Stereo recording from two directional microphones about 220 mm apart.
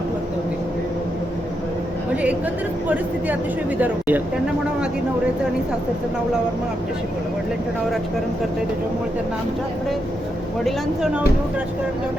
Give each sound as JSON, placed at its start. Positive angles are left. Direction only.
{"t": 3.8, "sound": "speech", "side_deg": -10}
{"t": 10.6, "sound": "speech", "side_deg": 0}